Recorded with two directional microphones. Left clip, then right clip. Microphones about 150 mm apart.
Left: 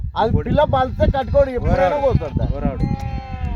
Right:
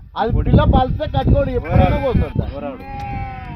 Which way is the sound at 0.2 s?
50° left (ahead or behind).